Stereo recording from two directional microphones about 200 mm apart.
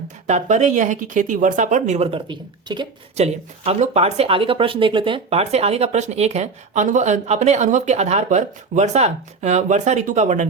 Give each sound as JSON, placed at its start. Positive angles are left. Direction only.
{"t": 0.3, "sound": "speech", "side_deg": -35}